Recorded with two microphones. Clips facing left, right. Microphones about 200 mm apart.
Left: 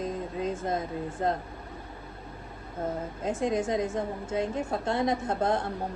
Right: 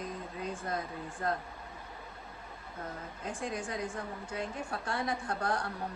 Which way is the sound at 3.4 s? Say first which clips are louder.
Left 10 dB; 25° left (ahead or behind).